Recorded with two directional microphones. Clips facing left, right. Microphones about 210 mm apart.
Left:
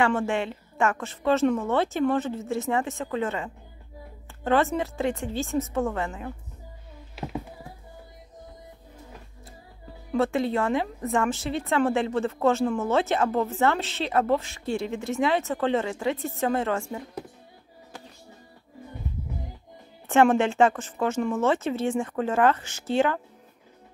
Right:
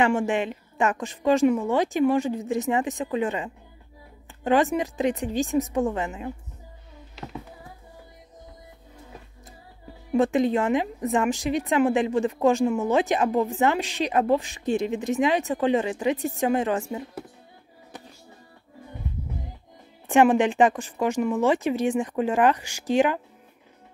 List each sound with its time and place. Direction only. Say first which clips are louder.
0.0 s a woman's voice: right 2 dB; 15° right (ahead or behind)
10.1 s a woman's voice: right 3 dB; 15° right (ahead or behind)
20.1 s a woman's voice: right 1 dB; 15° right (ahead or behind)